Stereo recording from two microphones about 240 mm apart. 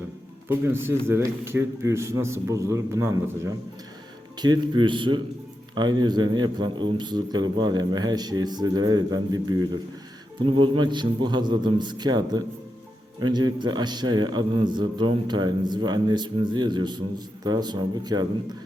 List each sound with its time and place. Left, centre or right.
0.4 s a man's voice: centre